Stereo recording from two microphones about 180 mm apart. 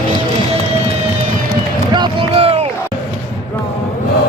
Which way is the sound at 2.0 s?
30° right (ahead or behind).